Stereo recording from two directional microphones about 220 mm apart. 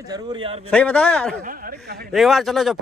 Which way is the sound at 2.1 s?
Centre (ahead or behind).